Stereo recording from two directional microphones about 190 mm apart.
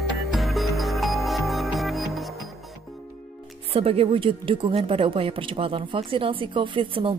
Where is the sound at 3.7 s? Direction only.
30° right (ahead or behind).